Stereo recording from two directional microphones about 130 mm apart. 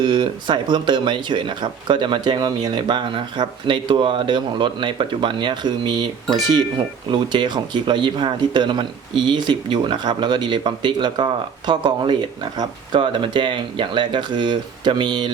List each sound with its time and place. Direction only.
0.0 s speech: 40° right (ahead or behind)